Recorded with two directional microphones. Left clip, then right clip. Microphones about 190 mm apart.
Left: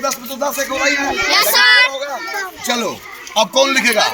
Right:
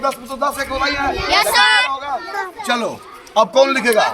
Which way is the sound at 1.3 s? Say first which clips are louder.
Left 2 dB; 60° right (ahead or behind).